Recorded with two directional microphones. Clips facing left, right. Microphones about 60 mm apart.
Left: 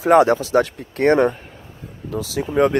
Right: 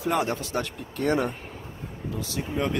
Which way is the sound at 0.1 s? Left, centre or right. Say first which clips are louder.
Left 14 dB; left.